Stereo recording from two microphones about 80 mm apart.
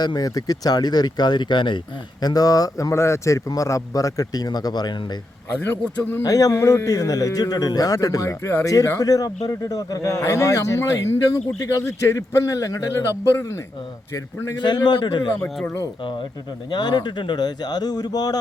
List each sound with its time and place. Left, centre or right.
0.0 s speech: left
2.2 s a man's voice: left
5.5 s a man's voice: left
6.2 s a man's voice: left
14.6 s a man's voice: left
16.7 s speech: left